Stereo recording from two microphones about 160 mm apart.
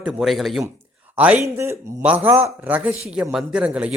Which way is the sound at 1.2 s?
10° right (ahead or behind).